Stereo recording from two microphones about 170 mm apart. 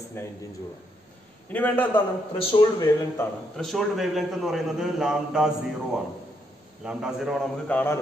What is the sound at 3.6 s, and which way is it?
A man's voice, centre (ahead or behind).